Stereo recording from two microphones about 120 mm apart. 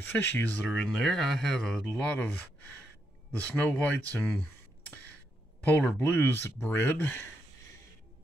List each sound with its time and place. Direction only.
0.0 s speech: 15° left (ahead or behind)
0.7 s speech: centre (ahead or behind)
3.4 s speech: 10° left (ahead or behind)
5.8 s speech: 15° left (ahead or behind)